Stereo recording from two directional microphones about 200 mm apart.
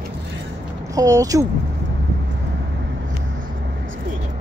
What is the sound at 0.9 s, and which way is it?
Speech, 15° right (ahead or behind).